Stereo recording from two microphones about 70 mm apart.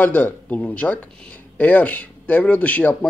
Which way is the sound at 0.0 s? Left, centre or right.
Left.